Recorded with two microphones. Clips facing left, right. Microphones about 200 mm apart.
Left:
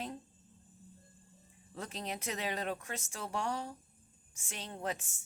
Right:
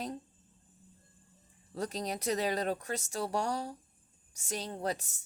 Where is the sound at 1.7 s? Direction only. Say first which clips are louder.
Right 6 dB; 40° right (ahead or behind).